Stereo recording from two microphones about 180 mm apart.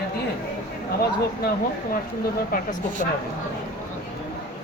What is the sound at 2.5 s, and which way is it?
Speech, 50° left (ahead or behind).